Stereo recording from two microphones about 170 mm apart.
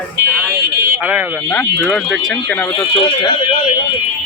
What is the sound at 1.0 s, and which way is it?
Speech, 10° right (ahead or behind).